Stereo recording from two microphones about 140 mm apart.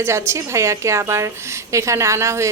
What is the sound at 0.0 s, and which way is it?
A woman's voice, 20° right (ahead or behind).